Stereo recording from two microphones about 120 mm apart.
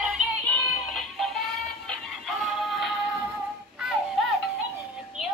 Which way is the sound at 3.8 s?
Centre (ahead or behind).